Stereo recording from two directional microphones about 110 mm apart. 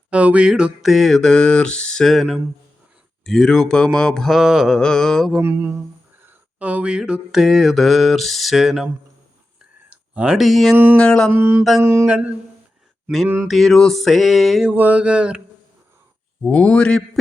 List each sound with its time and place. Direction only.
0.1 s mantra: 10° right (ahead or behind)
5.4 s speech: 20° right (ahead or behind)
6.2 s mantra: 15° right (ahead or behind)
9.9 s a man's voice: 10° right (ahead or behind); by 11.3 s 10° left (ahead or behind)
11.3 s speech: 20° right (ahead or behind)
12.0 s mantra: 10° right (ahead or behind)
13.2 s speech: 20° right (ahead or behind)
13.5 s mantra: centre (ahead or behind)
14.7 s mantra: 15° right (ahead or behind)
16.5 s a man's voice: 10° left (ahead or behind)